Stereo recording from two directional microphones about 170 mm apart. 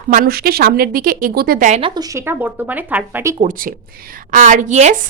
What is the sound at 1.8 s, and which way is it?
Speech, 30° right (ahead or behind).